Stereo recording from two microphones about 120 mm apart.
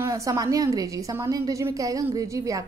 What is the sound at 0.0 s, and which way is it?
A woman's voice, 25° right (ahead or behind).